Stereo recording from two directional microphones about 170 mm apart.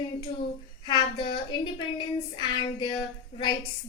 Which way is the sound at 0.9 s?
25° left (ahead or behind).